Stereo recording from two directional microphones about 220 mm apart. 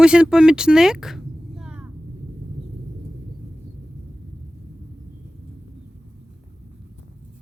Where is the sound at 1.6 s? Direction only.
5° right (ahead or behind).